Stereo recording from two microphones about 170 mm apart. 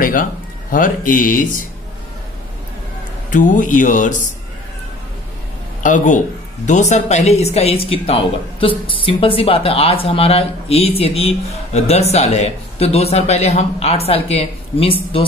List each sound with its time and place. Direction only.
0.0 s speech: 55° left (ahead or behind)
3.3 s speech: 50° left (ahead or behind)
5.8 s speech: 50° left (ahead or behind)